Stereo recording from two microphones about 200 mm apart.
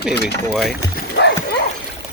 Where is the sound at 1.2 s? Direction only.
60° left (ahead or behind).